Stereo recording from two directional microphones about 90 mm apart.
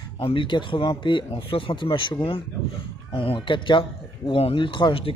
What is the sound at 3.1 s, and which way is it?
Speech, 80° left.